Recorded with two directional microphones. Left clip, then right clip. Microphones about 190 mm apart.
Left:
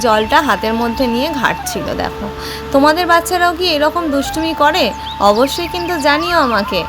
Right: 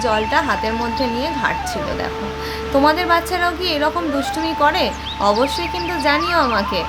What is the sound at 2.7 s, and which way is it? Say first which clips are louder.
Speech: left 4 dB; 35° left (ahead or behind).